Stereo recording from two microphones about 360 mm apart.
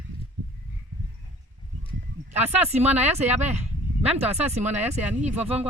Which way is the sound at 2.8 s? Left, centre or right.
Centre.